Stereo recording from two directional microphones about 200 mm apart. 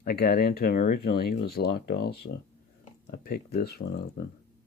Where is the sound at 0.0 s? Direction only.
50° left (ahead or behind).